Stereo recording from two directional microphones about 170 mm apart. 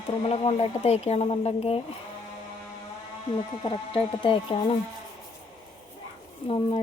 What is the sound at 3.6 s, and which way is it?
Speech, 30° left (ahead or behind).